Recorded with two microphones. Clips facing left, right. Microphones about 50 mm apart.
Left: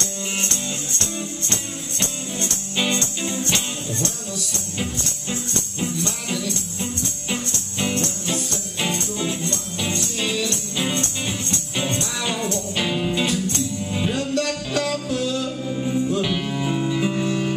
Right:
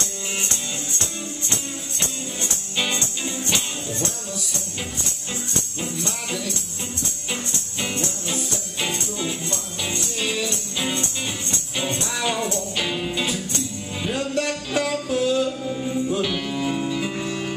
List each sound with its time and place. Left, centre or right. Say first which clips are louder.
0.0 s music: left 2 dB; centre
14.3 s music: left 1 dB; centre
15.4 s music: even; centre